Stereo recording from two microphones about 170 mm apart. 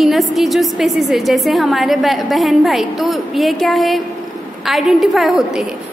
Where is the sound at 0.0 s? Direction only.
Centre (ahead or behind).